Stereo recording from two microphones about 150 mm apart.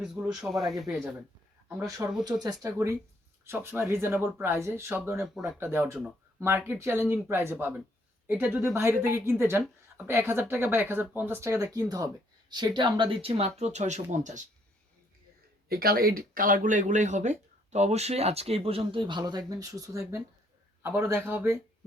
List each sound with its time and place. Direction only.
0.0 s speech: 5° right (ahead or behind)
2.0 s speech: 15° right (ahead or behind); by 14.4 s 55° right (ahead or behind)
15.7 s speech: 90° right; by 21.6 s 15° right (ahead or behind)